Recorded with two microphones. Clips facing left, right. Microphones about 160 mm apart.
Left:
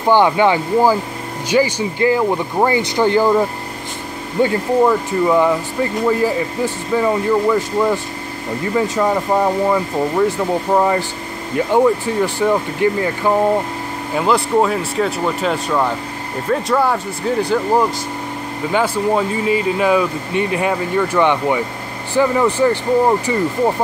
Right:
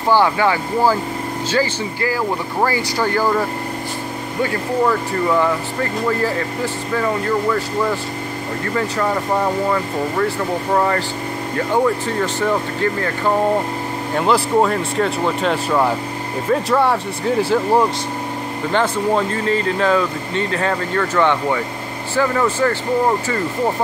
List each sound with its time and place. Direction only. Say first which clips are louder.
0.1 s speech: left 3 dB; 20° left (ahead or behind)
14.1 s speech: left 1 dB; centre (ahead or behind)